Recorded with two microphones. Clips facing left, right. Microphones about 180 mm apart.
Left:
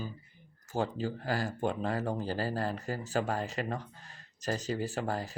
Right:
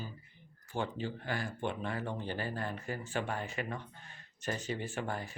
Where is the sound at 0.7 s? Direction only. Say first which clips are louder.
Left 4 dB; 40° left (ahead or behind).